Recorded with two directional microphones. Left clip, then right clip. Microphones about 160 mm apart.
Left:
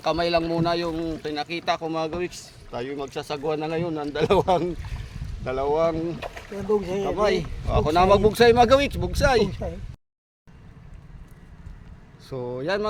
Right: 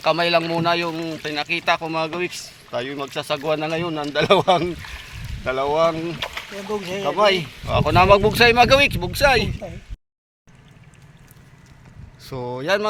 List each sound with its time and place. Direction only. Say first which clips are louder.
0.0 s a man's voice: right 4 dB; 25° right (ahead or behind); by 7.4 s 10° right (ahead or behind)
7.7 s speech: right 4 dB; centre (ahead or behind)
12.2 s speech: right 2 dB; 30° right (ahead or behind)